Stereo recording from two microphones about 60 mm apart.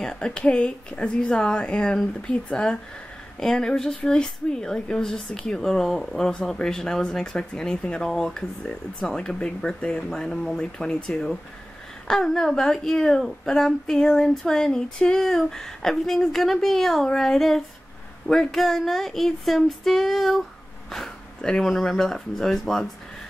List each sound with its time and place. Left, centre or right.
0.0 s speech: centre
12.1 s a woman's voice: centre